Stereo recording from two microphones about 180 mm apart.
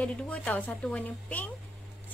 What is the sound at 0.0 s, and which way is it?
A woman's voice, 5° left (ahead or behind).